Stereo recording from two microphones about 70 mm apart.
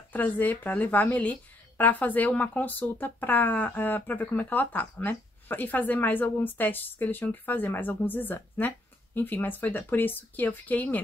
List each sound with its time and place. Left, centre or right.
0.1 s a woman's voice: left